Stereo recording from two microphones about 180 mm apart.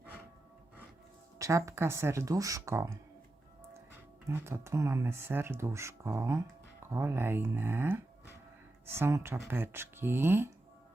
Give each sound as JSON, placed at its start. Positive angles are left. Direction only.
{"t": 1.4, "sound": "speech", "side_deg": -15}
{"t": 3.9, "sound": "speech", "side_deg": -10}